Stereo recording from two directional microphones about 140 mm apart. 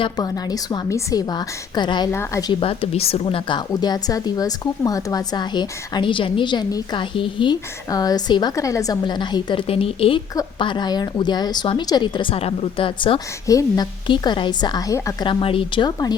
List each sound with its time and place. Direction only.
0.0 s a woman's voice: 30° left (ahead or behind)
2.0 s a woman's voice: 20° left (ahead or behind)
2.5 s speech: 40° left (ahead or behind)
3.7 s speech: 30° left (ahead or behind)
15.3 s speech: 40° left (ahead or behind)